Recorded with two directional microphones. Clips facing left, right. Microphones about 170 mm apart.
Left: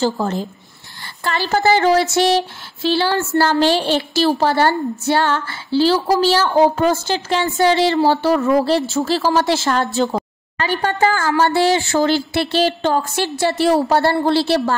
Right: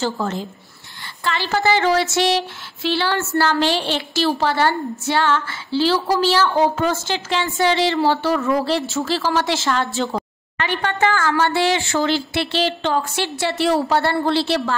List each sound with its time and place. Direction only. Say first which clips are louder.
0.0 s a woman's voice: left 4 dB; 35° left (ahead or behind)